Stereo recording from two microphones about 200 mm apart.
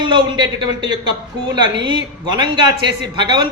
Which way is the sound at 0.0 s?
20° right (ahead or behind).